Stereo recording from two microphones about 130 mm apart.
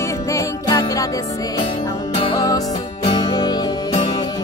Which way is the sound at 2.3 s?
30° left (ahead or behind).